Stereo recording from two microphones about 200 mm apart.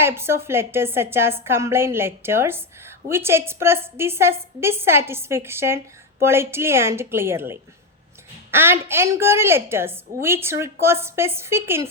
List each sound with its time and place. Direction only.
0.0 s a woman's voice: 10° right (ahead or behind)